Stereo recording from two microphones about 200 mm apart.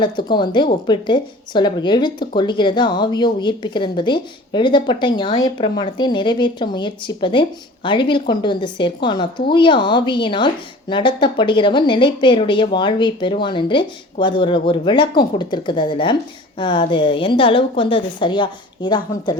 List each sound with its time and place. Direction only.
0.0 s a woman's voice: 20° left (ahead or behind)